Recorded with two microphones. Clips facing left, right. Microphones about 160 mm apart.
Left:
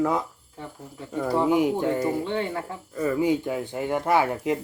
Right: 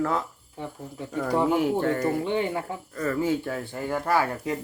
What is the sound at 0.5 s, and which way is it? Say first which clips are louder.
Speech: right 3 dB; 15° right (ahead or behind).